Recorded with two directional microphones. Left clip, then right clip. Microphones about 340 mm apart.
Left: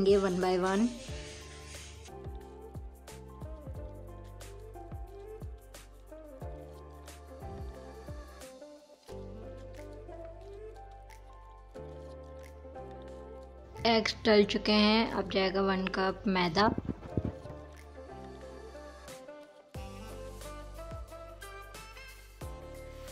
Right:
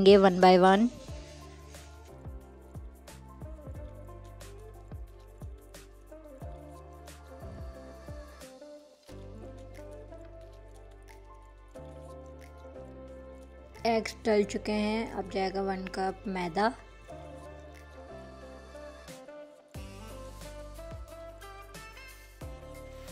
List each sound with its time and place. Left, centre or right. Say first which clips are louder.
0.0 s a woman's voice: right 8 dB; right
13.8 s a woman's voice: left 1 dB; centre
19.7 s music: left 1 dB; centre
22.4 s music: even; centre